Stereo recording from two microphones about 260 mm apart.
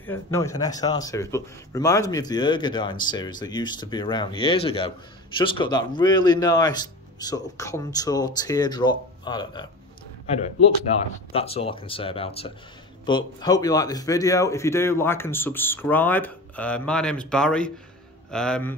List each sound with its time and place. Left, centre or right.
0.0 s a man's voice: centre
10.9 s a man's voice: left; by 18.8 s centre